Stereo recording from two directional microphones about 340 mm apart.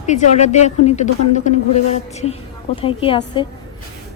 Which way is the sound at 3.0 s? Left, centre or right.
Centre.